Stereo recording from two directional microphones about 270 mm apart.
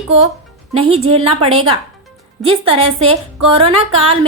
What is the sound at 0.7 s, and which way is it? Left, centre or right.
Speech, right.